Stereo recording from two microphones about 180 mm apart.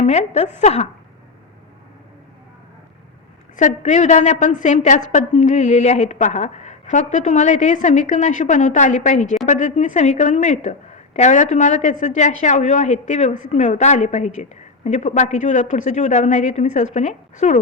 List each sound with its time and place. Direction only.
0.0 s a woman's voice: 40° left (ahead or behind)
3.5 s a woman's voice: 40° left (ahead or behind)